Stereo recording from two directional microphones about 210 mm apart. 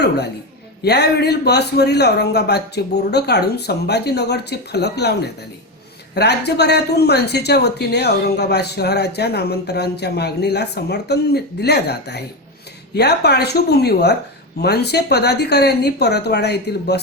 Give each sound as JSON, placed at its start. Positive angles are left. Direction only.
{"t": 0.8, "sound": "speech", "side_deg": 50}